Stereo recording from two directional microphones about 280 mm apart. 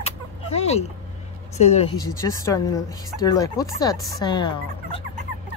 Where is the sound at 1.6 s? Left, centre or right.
Left.